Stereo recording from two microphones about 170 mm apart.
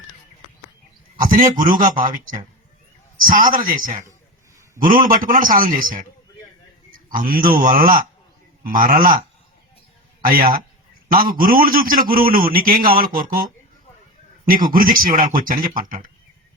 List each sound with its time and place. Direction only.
1.2 s a man's voice: 50° right (ahead or behind)
3.5 s a man's voice: 55° right (ahead or behind)
10.2 s a man's voice: 55° right (ahead or behind)